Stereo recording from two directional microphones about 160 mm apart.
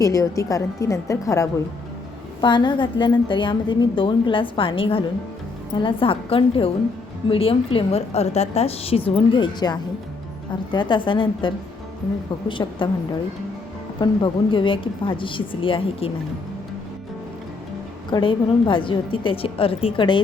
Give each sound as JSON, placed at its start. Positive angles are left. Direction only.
{"t": 0.0, "sound": "a woman's voice", "side_deg": 20}
{"t": 14.0, "sound": "a woman's voice", "side_deg": 30}
{"t": 18.1, "sound": "a woman's voice", "side_deg": 30}